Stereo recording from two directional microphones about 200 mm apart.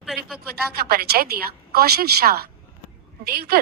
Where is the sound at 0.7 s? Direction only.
50° right (ahead or behind).